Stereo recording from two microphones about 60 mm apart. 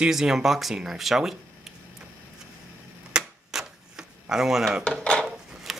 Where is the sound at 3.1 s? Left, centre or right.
Centre.